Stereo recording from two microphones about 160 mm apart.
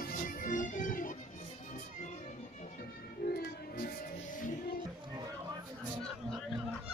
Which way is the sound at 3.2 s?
75° left (ahead or behind).